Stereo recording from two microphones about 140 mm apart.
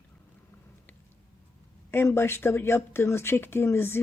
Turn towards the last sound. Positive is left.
turn(degrees=15)  # may be behind; listen again after turning